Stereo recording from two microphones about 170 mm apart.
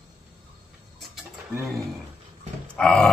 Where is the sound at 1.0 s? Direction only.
Centre (ahead or behind).